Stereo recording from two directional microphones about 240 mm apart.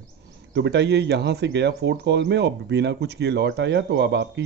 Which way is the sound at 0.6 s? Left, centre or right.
Right.